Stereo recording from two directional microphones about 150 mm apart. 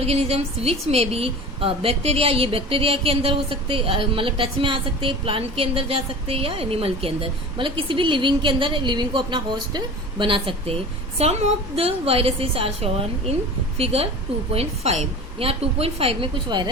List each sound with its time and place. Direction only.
0.0 s a woman's voice: 45° right (ahead or behind)
11.2 s a woman's voice: 45° right (ahead or behind)